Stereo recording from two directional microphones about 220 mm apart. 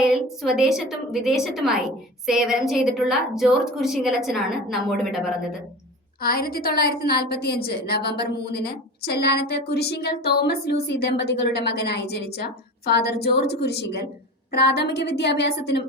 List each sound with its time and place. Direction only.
0.0 s a woman's voice: centre (ahead or behind)
6.2 s a woman's voice: 45° left (ahead or behind)